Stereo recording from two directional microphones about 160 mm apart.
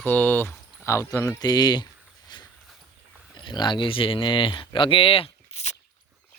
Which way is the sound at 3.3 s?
30° left (ahead or behind).